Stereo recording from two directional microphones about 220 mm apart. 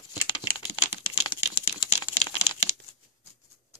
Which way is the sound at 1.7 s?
20° left (ahead or behind).